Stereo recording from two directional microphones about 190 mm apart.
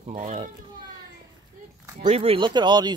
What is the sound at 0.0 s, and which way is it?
Speech, 40° right (ahead or behind).